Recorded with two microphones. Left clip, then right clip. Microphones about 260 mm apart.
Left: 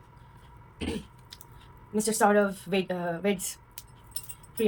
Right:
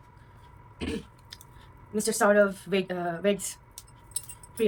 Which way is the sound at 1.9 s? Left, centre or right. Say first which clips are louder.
Right 1 dB; centre.